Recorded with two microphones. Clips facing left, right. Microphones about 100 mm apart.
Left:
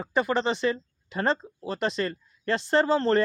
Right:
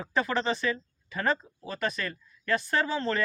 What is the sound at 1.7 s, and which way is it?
Speech, 25° left (ahead or behind).